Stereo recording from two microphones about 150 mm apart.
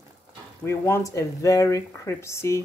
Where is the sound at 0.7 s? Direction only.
20° left (ahead or behind).